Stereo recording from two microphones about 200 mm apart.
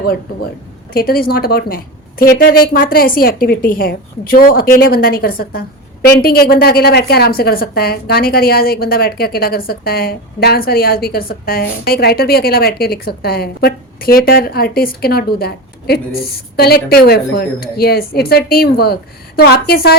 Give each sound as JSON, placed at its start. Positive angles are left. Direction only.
{"t": 0.9, "sound": "a woman's voice", "side_deg": 50}